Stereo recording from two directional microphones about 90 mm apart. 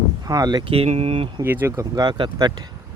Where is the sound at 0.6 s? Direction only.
90° right.